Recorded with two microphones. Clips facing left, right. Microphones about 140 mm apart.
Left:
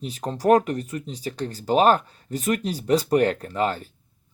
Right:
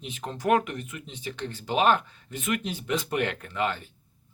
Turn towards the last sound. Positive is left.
turn(degrees=35)  # may be behind; listen again after turning